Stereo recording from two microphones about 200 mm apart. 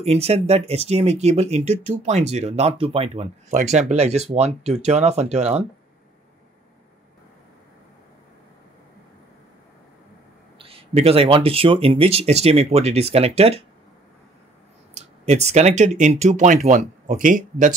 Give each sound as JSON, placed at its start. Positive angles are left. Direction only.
{"t": 0.0, "sound": "speech", "side_deg": -30}
{"t": 10.6, "sound": "speech", "side_deg": -30}
{"t": 15.0, "sound": "speech", "side_deg": -35}